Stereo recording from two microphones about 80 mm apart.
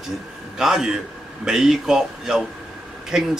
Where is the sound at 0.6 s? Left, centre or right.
Centre.